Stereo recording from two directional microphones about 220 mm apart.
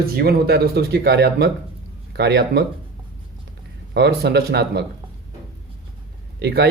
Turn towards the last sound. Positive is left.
turn(degrees=-45)  # may be behind; listen again after turning